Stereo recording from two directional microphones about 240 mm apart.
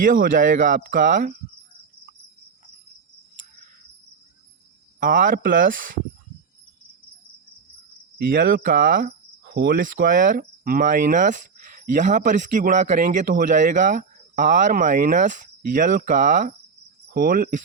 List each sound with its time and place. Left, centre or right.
0.0 s speech: right
4.9 s speech: right
8.2 s speech: right